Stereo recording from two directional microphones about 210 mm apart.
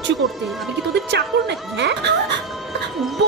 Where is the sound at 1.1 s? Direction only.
55° right (ahead or behind).